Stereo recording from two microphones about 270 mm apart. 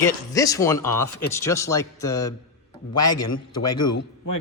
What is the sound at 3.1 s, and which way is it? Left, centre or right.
Speech, left.